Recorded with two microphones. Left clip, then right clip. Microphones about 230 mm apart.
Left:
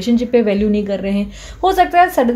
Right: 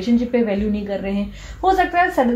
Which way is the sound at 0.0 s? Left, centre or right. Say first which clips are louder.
Left 5 dB; left.